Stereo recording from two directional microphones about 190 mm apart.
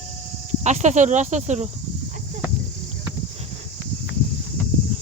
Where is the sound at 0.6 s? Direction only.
40° right (ahead or behind).